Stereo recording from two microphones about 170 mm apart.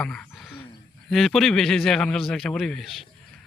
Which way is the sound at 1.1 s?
Centre (ahead or behind).